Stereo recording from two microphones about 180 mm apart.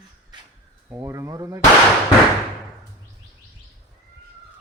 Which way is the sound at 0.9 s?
15° right (ahead or behind).